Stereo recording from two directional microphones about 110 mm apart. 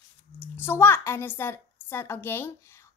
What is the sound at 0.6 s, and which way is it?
Speech, 20° left (ahead or behind).